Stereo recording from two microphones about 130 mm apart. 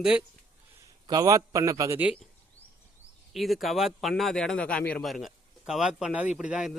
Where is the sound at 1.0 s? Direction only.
30° right (ahead or behind).